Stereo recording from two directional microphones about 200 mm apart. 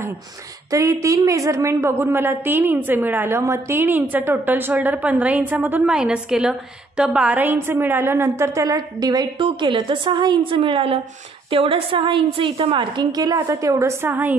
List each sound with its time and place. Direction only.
0.7 s a woman's voice: 15° right (ahead or behind)